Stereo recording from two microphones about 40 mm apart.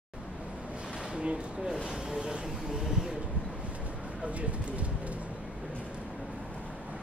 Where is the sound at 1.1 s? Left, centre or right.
Right.